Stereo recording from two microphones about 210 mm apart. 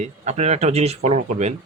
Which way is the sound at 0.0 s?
30° right (ahead or behind).